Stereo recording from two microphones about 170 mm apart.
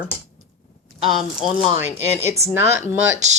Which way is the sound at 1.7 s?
40° left (ahead or behind).